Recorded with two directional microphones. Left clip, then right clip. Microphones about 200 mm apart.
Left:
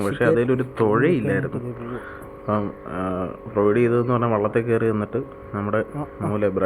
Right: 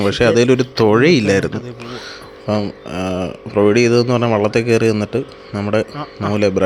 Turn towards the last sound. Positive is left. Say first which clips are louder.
# right 6 dB
turn(degrees=-55)  # may be behind; listen again after turning